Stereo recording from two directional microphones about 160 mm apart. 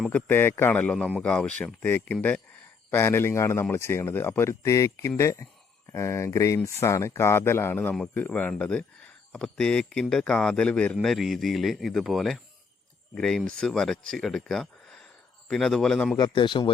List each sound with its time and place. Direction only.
0.1 s speech: 15° left (ahead or behind)
16.1 s speech: 30° left (ahead or behind)